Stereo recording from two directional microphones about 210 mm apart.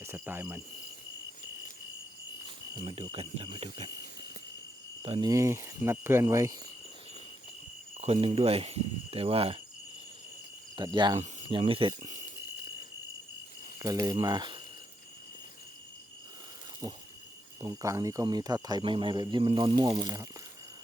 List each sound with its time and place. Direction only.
0.0 s cricket: 10° right (ahead or behind)
2.8 s speech: 25° right (ahead or behind)
5.0 s speech: 25° right (ahead or behind)
5.3 s speech: 15° right (ahead or behind)
8.0 s speech: 25° right (ahead or behind)
10.8 s speech: 20° right (ahead or behind)
14.0 s speech: 20° right (ahead or behind)
17.6 s speech: 15° right (ahead or behind)